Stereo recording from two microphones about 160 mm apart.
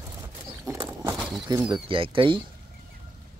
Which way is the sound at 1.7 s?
35° right (ahead or behind).